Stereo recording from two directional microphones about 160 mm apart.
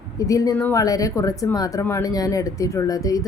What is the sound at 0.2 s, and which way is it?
A woman's voice, 20° left (ahead or behind).